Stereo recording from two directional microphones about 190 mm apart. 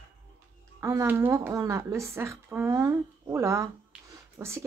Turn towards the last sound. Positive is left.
turn(degrees=-15)  # may be behind; listen again after turning